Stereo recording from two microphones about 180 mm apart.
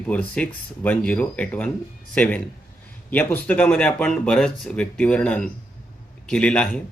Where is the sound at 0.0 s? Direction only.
10° left (ahead or behind).